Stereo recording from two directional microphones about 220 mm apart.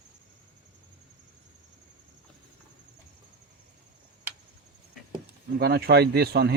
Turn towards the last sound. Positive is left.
turn(degrees=-45)  # may be behind; listen again after turning